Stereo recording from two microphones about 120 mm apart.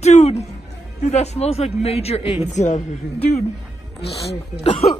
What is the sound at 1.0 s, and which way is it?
Speech, 70° left (ahead or behind).